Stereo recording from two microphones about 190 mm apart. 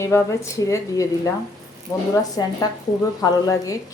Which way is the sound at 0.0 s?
15° left (ahead or behind).